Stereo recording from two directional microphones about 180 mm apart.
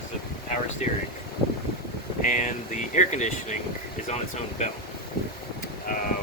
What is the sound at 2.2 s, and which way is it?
Speech, 45° left (ahead or behind).